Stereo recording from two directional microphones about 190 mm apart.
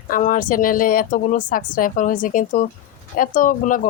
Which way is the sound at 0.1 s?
45° left (ahead or behind).